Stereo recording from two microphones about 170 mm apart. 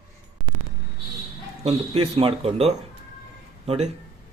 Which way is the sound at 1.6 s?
35° right (ahead or behind).